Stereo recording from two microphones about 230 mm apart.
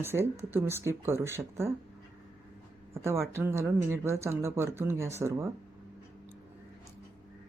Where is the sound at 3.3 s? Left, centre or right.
Centre.